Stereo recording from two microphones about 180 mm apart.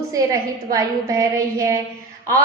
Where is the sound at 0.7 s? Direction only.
20° right (ahead or behind).